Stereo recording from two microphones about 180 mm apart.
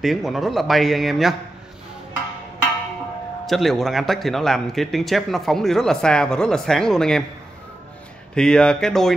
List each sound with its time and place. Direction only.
0.0 s speech: centre (ahead or behind)
3.4 s speech: centre (ahead or behind)
8.4 s speech: 5° left (ahead or behind)